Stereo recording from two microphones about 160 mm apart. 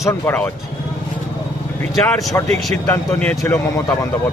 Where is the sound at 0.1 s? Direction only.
10° left (ahead or behind).